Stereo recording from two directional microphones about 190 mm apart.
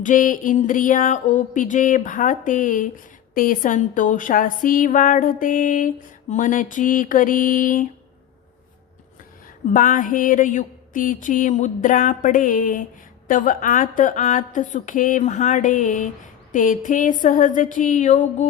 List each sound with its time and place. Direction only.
0.0 s music: 45° left (ahead or behind)
9.7 s music: 45° left (ahead or behind)